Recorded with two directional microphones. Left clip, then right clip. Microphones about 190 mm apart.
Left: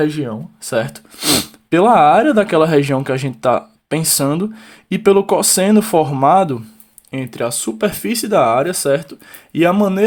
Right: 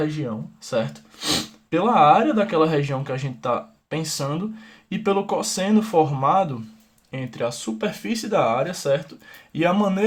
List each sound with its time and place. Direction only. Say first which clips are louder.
0.0 s speech: left 8 dB; 45° left (ahead or behind)